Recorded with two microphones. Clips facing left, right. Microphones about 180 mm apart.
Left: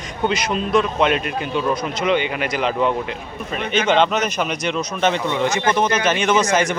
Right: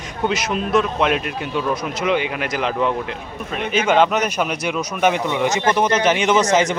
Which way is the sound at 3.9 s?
10° right (ahead or behind).